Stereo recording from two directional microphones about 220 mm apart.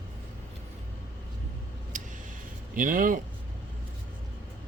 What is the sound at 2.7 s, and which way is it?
Speech, 40° right (ahead or behind).